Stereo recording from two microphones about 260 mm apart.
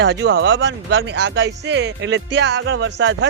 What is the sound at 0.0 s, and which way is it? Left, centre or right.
Speech, right.